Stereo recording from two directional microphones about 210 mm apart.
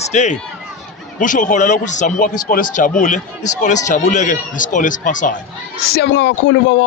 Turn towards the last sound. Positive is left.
turn(degrees=60)  # may be behind; listen again after turning